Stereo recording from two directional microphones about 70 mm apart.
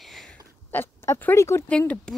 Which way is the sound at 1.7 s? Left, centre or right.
Centre.